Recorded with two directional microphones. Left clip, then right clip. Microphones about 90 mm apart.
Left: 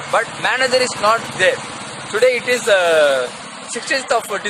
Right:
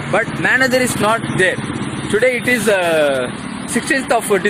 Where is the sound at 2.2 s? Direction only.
10° left (ahead or behind).